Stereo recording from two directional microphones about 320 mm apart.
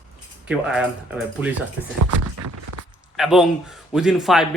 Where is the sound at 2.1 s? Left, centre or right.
Right.